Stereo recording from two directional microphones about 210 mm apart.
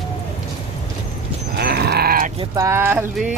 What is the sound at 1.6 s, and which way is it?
Livestock, 50° right (ahead or behind).